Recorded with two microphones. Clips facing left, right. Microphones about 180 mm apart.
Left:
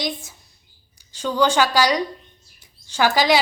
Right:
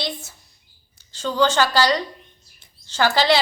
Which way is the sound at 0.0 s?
15° left (ahead or behind).